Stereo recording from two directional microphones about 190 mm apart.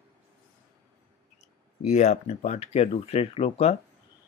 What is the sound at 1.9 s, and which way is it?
Speech, 35° left (ahead or behind).